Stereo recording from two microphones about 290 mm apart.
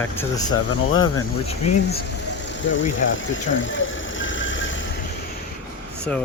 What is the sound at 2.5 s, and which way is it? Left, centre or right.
Vehicle, left.